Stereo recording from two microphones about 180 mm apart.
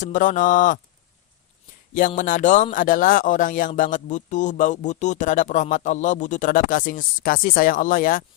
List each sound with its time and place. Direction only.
0.0 s speech: 45° left (ahead or behind)
1.9 s speech: 45° left (ahead or behind)